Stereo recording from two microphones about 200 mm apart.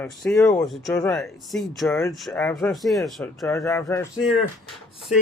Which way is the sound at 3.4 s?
15° left (ahead or behind).